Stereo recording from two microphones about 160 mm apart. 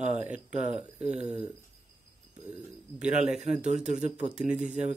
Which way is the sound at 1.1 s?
45° right (ahead or behind).